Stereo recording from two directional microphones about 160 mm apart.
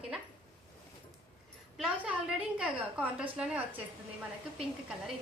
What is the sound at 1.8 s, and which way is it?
A woman's voice, 5° right (ahead or behind).